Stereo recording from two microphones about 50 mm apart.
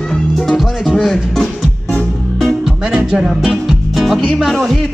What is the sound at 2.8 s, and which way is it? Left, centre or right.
Music, centre.